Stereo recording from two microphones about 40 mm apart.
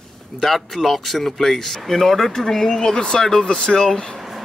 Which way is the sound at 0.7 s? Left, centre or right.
Centre.